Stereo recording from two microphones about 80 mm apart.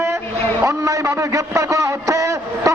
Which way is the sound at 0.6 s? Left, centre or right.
Right.